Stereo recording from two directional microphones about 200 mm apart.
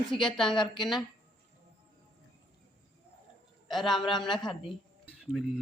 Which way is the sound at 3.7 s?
Centre (ahead or behind).